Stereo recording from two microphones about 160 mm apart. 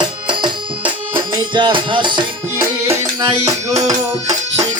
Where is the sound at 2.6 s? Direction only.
20° right (ahead or behind).